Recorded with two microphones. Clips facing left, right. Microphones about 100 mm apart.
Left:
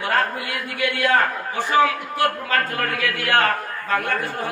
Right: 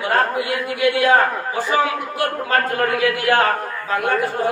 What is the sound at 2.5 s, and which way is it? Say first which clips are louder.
Speech: right 4 dB; 35° right (ahead or behind).